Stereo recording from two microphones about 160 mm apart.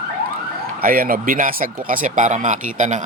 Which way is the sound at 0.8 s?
65° right (ahead or behind).